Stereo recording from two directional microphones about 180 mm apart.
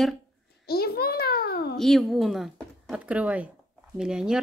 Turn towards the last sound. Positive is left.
turn(degrees=-5)  # may be behind; listen again after turning